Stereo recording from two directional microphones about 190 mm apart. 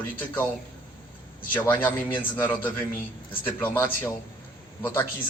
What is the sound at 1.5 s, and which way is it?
Speech, 10° left (ahead or behind).